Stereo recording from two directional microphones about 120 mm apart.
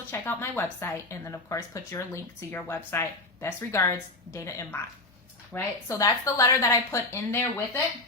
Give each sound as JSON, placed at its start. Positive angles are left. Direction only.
{"t": 0.1, "sound": "a woman's voice", "side_deg": 20}
{"t": 5.9, "sound": "a woman's voice", "side_deg": 30}